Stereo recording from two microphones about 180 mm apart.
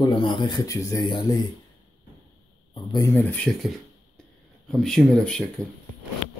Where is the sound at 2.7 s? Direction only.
25° left (ahead or behind).